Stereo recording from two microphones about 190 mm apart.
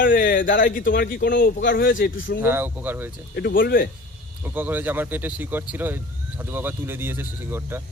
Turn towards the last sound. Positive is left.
turn(degrees=-10)  # may be behind; listen again after turning